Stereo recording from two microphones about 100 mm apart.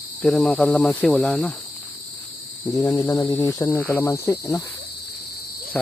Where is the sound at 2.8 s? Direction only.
30° left (ahead or behind).